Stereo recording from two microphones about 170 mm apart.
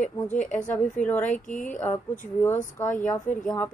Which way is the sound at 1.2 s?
50° left (ahead or behind).